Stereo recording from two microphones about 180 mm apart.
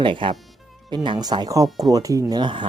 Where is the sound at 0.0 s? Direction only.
25° right (ahead or behind).